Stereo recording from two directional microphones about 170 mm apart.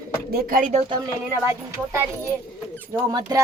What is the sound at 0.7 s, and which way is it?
Speech, 35° right (ahead or behind).